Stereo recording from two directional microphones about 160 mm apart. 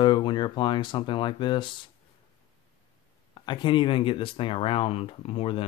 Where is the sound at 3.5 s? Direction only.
30° left (ahead or behind).